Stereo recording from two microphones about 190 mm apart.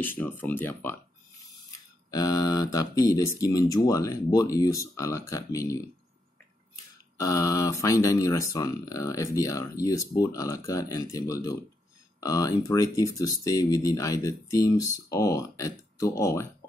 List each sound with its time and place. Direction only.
0.0 s speech: 10° left (ahead or behind)
2.0 s speech: 20° left (ahead or behind)